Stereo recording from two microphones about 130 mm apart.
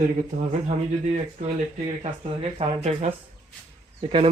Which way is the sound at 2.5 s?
50° right (ahead or behind).